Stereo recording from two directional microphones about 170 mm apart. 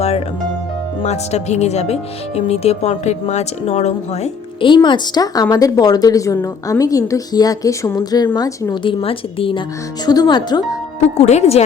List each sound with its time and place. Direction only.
1.0 s speech: 40° left (ahead or behind); by 8.8 s 20° left (ahead or behind)
8.8 s a woman's voice: 30° left (ahead or behind)
11.2 s a woman's voice: 40° left (ahead or behind)